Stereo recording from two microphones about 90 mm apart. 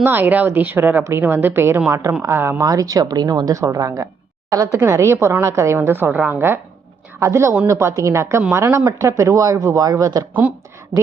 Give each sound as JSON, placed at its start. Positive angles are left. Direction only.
{"t": 0.0, "sound": "speech", "side_deg": -20}
{"t": 2.6, "sound": "speech", "side_deg": -40}
{"t": 10.4, "sound": "speech", "side_deg": -15}
{"t": 10.9, "sound": "speech", "side_deg": -35}